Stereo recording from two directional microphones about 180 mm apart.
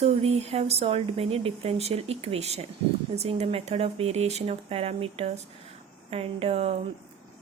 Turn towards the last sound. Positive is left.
turn(degrees=-35)  # may be behind; listen again after turning